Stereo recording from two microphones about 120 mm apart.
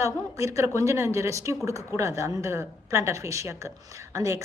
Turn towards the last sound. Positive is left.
turn(degrees=-25)  # may be behind; listen again after turning